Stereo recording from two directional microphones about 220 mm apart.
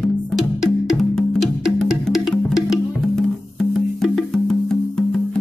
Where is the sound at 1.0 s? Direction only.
Centre (ahead or behind).